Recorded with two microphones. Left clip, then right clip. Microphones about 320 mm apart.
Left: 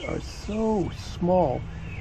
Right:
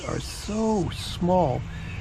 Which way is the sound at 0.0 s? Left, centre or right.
Centre.